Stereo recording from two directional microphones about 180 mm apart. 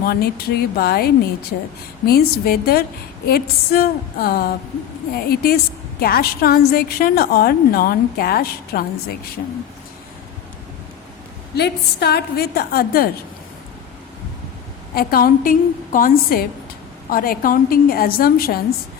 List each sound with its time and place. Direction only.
0.0 s a woman's voice: 60° left (ahead or behind)
11.5 s a woman's voice: 65° left (ahead or behind)
14.9 s a woman's voice: 55° left (ahead or behind)